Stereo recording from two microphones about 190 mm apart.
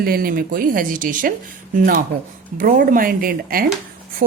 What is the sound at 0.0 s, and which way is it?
A woman's voice, 50° right (ahead or behind).